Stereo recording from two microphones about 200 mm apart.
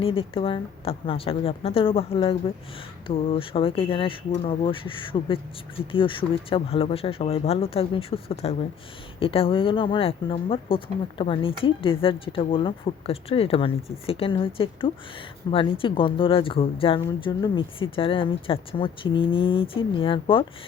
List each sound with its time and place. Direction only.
0.0 s speech: 25° left (ahead or behind)